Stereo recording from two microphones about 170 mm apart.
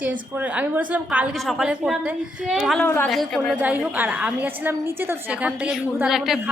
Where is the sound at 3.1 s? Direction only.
Centre (ahead or behind).